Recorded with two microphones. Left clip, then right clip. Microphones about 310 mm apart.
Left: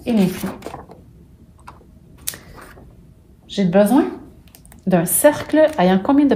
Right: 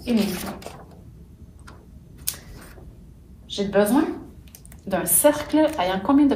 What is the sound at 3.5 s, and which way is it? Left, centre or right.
Speech, left.